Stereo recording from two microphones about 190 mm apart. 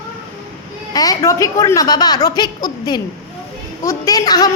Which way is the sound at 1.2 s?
15° left (ahead or behind).